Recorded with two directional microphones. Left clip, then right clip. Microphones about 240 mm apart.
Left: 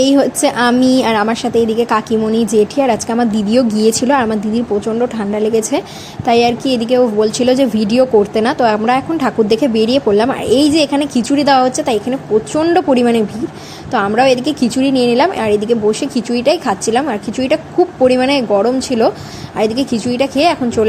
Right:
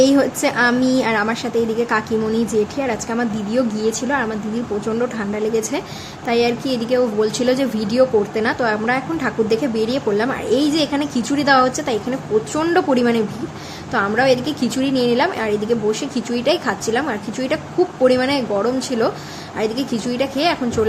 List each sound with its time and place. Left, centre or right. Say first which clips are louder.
0.0 s a woman's voice: left 3 dB; centre